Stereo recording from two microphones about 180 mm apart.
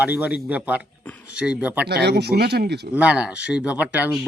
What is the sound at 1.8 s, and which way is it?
Speech, 65° right (ahead or behind).